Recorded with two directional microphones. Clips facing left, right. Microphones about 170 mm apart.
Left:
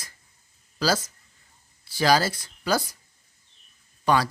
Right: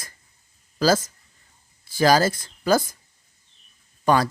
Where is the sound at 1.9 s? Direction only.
45° right (ahead or behind).